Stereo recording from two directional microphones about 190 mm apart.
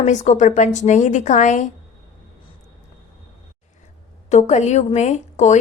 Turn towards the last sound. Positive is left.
turn(degrees=35)  # may be behind; listen again after turning